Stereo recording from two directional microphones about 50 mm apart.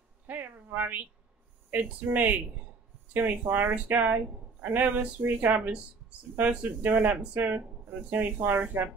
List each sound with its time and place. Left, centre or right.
0.3 s speech: right
6.8 s speech: right